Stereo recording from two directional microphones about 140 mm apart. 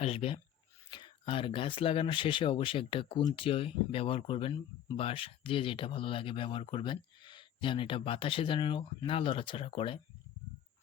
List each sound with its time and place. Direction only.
0.0 s speech: 45° left (ahead or behind)